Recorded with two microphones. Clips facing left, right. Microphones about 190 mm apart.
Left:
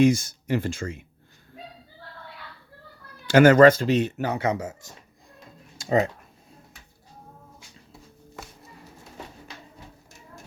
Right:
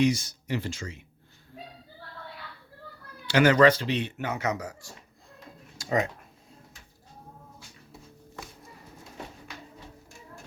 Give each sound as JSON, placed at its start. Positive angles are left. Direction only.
{"t": 0.0, "sound": "speech", "side_deg": 50}
{"t": 3.2, "sound": "speech", "side_deg": 45}
{"t": 5.7, "sound": "a sound", "side_deg": 25}